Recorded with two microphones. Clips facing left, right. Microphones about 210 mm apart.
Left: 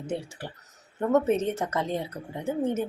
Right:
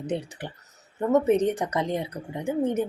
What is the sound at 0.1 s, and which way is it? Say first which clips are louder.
Speech: right 2 dB; 20° right (ahead or behind).